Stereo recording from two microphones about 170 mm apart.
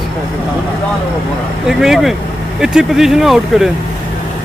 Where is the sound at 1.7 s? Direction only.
Centre (ahead or behind).